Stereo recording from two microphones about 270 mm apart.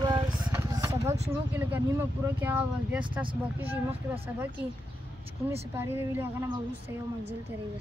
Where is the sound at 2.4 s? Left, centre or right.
Centre.